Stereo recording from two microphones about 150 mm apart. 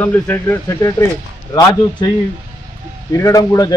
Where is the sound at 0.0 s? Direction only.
10° left (ahead or behind).